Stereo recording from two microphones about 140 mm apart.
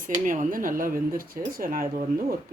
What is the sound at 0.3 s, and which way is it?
Speech, 75° right (ahead or behind).